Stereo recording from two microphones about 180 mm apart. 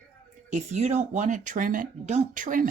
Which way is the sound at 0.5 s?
40° right (ahead or behind).